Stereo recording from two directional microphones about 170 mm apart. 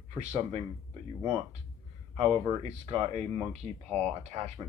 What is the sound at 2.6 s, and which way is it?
Speech, 35° right (ahead or behind).